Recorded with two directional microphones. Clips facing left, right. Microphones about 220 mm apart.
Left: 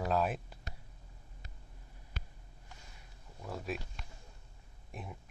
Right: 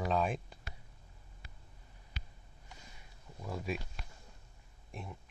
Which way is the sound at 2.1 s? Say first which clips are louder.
Left 3 dB; 50° left (ahead or behind).